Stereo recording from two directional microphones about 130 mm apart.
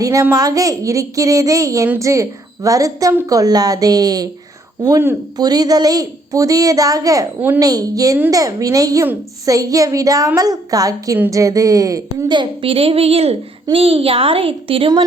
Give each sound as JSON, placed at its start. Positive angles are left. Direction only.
{"t": 0.0, "sound": "a woman's voice", "side_deg": -25}